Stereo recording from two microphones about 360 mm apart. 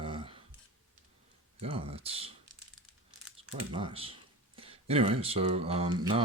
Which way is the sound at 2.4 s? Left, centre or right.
Right.